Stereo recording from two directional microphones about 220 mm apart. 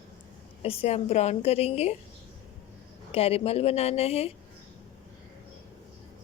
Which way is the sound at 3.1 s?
25° left (ahead or behind).